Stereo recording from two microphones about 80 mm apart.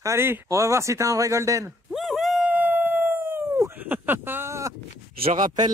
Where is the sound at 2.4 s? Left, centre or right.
Right.